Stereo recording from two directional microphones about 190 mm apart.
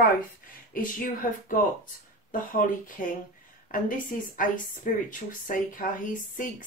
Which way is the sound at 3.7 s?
45° left (ahead or behind).